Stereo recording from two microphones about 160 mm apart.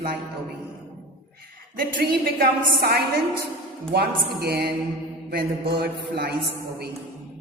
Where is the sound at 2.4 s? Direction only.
85° right.